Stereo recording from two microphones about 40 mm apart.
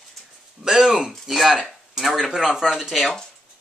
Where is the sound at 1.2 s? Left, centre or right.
Centre.